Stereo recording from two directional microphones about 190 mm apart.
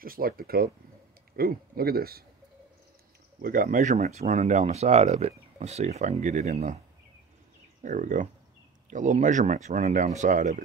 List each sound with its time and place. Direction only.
0.0 s a man's voice: 50° right (ahead or behind)
3.4 s speech: 50° right (ahead or behind)
7.8 s speech: 40° right (ahead or behind)